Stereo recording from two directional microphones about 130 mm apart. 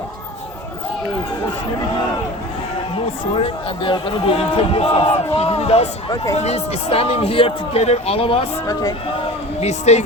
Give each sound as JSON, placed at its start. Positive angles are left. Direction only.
{"t": 2.9, "sound": "speech", "side_deg": 45}
{"t": 8.6, "sound": "speech", "side_deg": 30}
{"t": 9.1, "sound": "speech", "side_deg": 55}